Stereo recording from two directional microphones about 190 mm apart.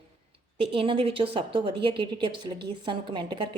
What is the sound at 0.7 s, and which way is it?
A woman's voice, 30° right (ahead or behind).